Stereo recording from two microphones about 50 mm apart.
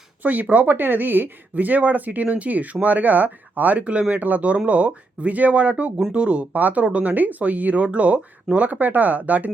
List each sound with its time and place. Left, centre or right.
0.2 s speech: right